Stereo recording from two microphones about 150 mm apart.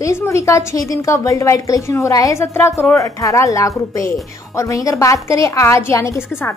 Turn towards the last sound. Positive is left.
turn(degrees=15)  # may be behind; listen again after turning